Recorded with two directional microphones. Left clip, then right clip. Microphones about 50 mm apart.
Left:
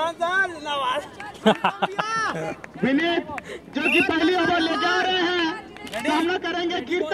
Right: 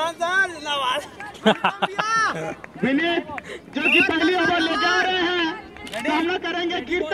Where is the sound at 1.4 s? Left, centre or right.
Centre.